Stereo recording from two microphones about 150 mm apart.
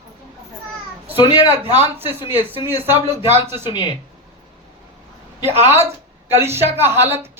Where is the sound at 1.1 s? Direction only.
30° left (ahead or behind).